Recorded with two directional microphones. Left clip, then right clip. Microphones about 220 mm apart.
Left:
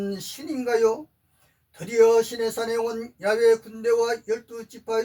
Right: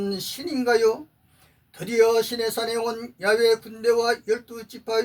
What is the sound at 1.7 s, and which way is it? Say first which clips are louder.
Speech: left 1 dB; 40° right (ahead or behind).